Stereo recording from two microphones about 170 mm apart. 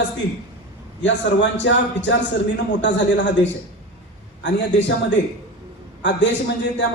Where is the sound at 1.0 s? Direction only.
90° left.